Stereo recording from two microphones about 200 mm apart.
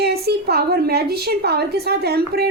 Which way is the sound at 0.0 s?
55° right (ahead or behind).